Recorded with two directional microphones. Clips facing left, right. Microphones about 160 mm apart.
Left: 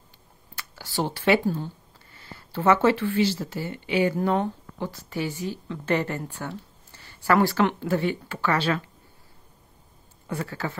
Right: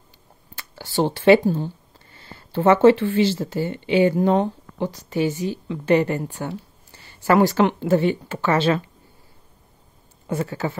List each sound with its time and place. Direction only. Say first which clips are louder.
0.6 s speech: right 6 dB; 25° right (ahead or behind)
10.2 s speech: right 6 dB; 20° right (ahead or behind)